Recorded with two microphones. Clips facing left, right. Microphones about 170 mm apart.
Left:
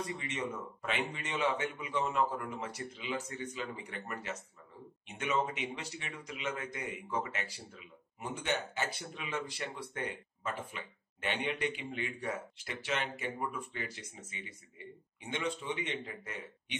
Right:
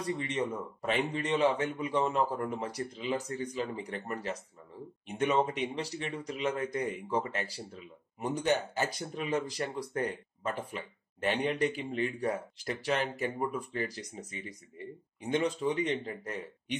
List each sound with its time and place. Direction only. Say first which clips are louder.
0.0 s speech: right 5 dB; 35° right (ahead or behind)